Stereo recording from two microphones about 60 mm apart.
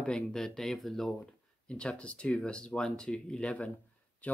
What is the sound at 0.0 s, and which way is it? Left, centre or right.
Speech, centre.